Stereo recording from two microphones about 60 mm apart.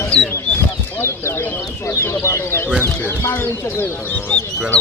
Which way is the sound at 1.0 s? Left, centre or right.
Left.